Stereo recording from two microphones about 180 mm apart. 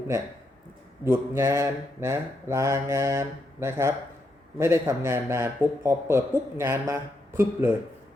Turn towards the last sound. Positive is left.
turn(degrees=-15)  # may be behind; listen again after turning